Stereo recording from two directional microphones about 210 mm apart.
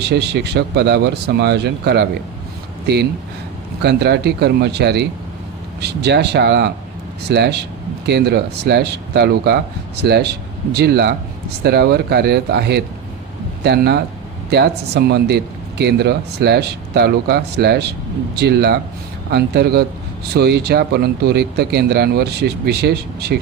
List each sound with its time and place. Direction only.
0.0 s speech: 50° right (ahead or behind)